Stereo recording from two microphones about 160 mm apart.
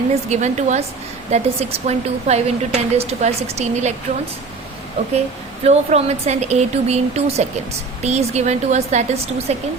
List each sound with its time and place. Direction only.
0.1 s speech: 45° right (ahead or behind)
5.6 s speech: 40° right (ahead or behind)